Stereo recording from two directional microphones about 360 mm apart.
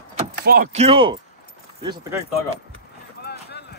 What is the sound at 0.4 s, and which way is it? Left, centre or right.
Speech, right.